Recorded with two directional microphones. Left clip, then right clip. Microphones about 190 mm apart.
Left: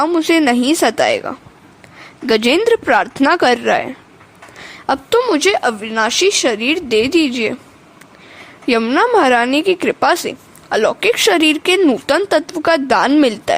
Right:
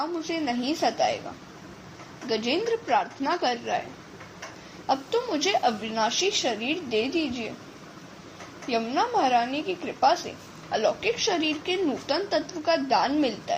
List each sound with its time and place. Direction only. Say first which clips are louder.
0.0 s a woman's voice: left 16 dB; 60° left (ahead or behind)
2.2 s a woman's voice: left 14 dB; 55° left (ahead or behind)
4.9 s a woman's voice: left 12 dB; 55° left (ahead or behind)
8.6 s a woman's voice: left 12 dB; 55° left (ahead or behind)